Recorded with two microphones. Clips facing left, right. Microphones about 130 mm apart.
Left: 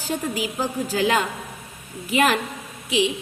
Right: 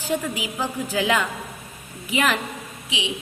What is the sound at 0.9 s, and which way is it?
A woman's voice, 40° left (ahead or behind).